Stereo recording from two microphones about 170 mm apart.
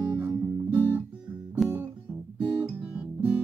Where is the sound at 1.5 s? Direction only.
5° right (ahead or behind).